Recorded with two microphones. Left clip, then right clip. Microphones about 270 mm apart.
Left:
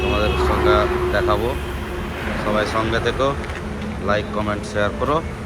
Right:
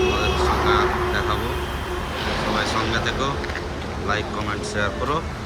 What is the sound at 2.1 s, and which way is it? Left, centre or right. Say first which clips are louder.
Vehicle: right 1 dB; right.